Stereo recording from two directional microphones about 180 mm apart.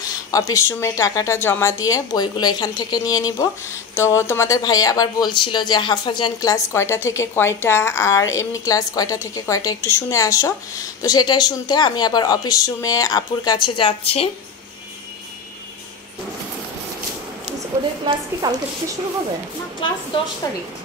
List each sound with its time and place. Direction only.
0.0 s speech: 20° left (ahead or behind)
18.1 s a woman's voice: 25° right (ahead or behind)